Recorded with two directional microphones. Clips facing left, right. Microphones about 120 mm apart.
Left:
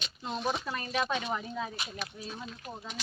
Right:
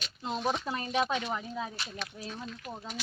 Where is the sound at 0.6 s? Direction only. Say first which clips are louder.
Right 2 dB; 20° right (ahead or behind).